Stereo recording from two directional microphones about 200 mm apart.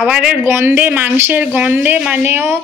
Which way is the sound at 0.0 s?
5° right (ahead or behind).